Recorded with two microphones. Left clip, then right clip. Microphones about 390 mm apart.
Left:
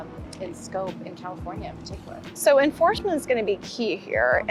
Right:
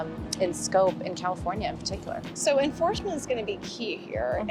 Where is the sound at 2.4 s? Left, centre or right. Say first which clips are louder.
Left 6 dB; left.